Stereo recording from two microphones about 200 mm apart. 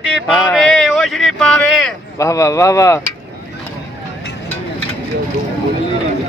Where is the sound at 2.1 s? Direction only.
15° left (ahead or behind).